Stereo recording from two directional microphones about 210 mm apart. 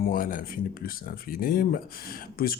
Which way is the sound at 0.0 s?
45° left (ahead or behind).